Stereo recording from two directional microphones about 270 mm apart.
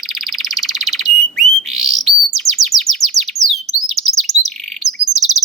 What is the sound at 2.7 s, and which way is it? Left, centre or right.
Bird, right.